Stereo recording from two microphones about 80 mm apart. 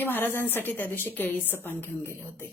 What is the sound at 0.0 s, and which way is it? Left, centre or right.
A woman's voice, left.